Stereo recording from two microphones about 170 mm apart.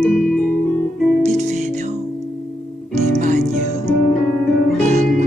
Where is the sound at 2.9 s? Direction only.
45° right (ahead or behind).